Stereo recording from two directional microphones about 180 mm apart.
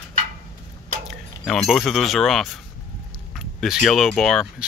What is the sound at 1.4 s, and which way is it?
Speech, centre (ahead or behind).